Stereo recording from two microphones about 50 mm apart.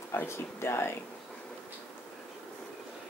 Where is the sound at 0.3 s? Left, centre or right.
Left.